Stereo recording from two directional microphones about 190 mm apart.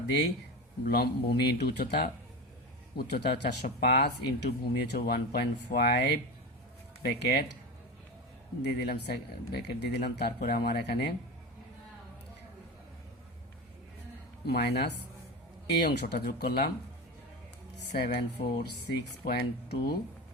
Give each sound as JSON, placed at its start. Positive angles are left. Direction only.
{"t": 0.9, "sound": "speech", "side_deg": 60}
{"t": 8.6, "sound": "speech", "side_deg": 60}
{"t": 14.4, "sound": "speech", "side_deg": 60}
{"t": 17.9, "sound": "speech", "side_deg": 55}